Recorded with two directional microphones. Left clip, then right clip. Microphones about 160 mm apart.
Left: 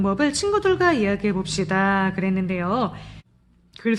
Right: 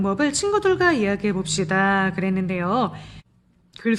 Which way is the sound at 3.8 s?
10° right (ahead or behind).